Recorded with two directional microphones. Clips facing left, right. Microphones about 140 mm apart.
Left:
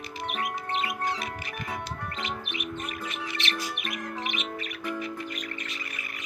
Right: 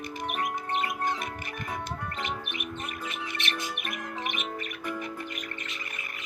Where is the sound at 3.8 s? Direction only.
50° right (ahead or behind).